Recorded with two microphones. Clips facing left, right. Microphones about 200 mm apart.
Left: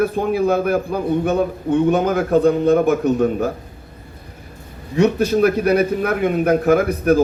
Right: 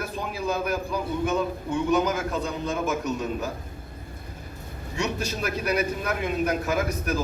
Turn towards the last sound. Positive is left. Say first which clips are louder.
# left 11 dB
turn(degrees=60)  # may be behind; listen again after turning